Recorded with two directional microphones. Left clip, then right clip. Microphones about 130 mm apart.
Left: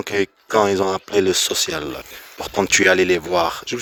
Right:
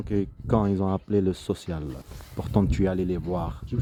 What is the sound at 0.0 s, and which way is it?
Speech, 25° left (ahead or behind).